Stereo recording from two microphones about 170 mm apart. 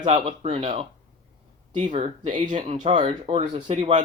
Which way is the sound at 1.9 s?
40° right (ahead or behind).